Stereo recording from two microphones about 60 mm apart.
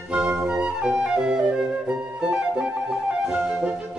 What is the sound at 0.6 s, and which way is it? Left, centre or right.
Flute, centre.